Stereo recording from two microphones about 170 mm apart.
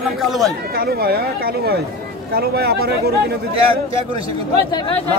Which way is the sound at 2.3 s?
70° right (ahead or behind).